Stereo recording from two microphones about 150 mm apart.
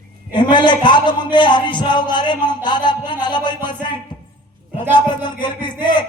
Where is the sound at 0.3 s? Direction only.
30° left (ahead or behind).